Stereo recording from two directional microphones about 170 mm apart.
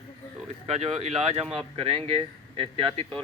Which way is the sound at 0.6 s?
40° right (ahead or behind).